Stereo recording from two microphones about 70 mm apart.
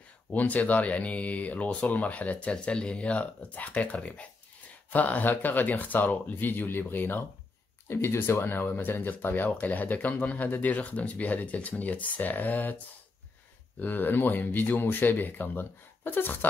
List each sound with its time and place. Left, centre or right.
0.3 s speech: left
13.7 s speech: left